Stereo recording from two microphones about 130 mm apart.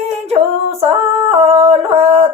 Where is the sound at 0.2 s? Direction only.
55° right (ahead or behind).